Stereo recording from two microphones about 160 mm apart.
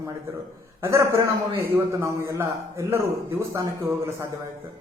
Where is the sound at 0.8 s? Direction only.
15° right (ahead or behind).